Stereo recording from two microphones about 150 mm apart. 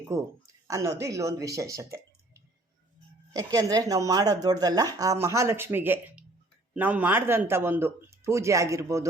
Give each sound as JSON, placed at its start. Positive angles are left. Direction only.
{"t": 0.1, "sound": "speech", "side_deg": -20}
{"t": 3.3, "sound": "speech", "side_deg": -25}